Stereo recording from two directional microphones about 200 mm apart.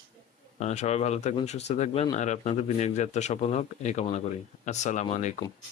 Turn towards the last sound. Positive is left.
turn(degrees=35)  # may be behind; listen again after turning